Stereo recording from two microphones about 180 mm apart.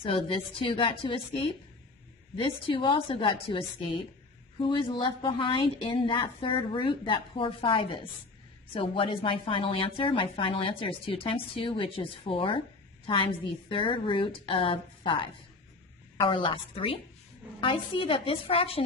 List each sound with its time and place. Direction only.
0.0 s a woman's voice: 30° left (ahead or behind)